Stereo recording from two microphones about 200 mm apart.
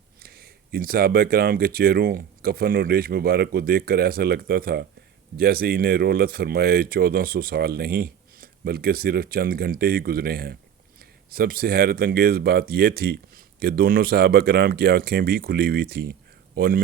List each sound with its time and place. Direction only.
0.2 s speech: 50° right (ahead or behind)